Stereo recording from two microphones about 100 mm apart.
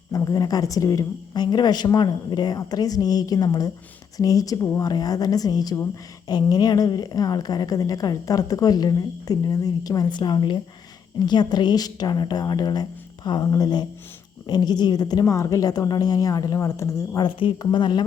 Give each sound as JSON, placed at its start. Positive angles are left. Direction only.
{"t": 0.1, "sound": "a woman's voice", "side_deg": 35}
{"t": 17.2, "sound": "a woman's voice", "side_deg": 50}